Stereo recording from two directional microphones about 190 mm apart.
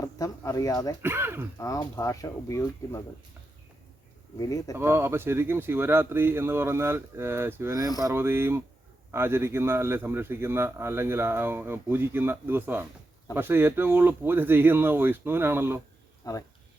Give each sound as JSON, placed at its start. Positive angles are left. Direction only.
{"t": 0.0, "sound": "speech", "side_deg": 20}
{"t": 1.0, "sound": "a man's voice", "side_deg": -10}
{"t": 1.5, "sound": "speech", "side_deg": 15}
{"t": 4.4, "sound": "speech", "side_deg": 20}
{"t": 4.7, "sound": "a man's voice", "side_deg": -15}
{"t": 16.2, "sound": "speech", "side_deg": 20}